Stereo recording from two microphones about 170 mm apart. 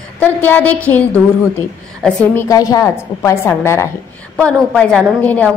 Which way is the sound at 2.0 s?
10° left (ahead or behind).